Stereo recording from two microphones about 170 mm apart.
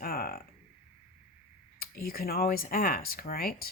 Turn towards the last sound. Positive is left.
turn(degrees=60)  # may be behind; listen again after turning